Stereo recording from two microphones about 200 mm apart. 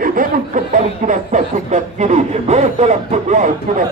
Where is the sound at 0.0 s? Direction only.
45° right (ahead or behind).